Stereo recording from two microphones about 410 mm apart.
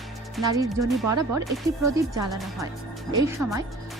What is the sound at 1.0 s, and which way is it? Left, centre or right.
Speech, right.